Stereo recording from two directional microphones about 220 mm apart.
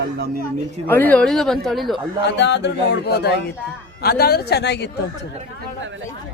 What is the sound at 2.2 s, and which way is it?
Speech, 50° left (ahead or behind).